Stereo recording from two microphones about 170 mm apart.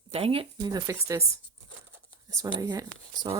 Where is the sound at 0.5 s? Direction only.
20° right (ahead or behind).